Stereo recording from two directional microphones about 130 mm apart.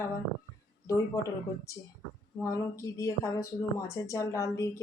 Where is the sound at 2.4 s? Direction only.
20° left (ahead or behind).